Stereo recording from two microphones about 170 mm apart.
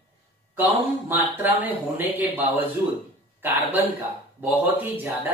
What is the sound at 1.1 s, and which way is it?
A man's voice, 10° right (ahead or behind).